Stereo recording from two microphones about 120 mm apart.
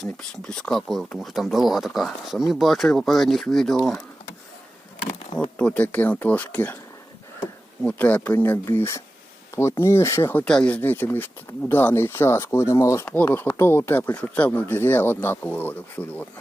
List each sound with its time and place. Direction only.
0.0 s speech: 5° left (ahead or behind)
5.5 s speech: 10° left (ahead or behind)
7.8 s speech: 10° left (ahead or behind)
10.4 s speech: 10° left (ahead or behind)